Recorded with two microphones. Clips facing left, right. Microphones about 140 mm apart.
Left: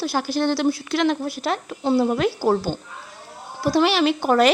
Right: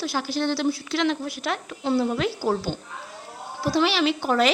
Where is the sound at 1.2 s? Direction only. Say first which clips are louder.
Left 4 dB; 35° left (ahead or behind).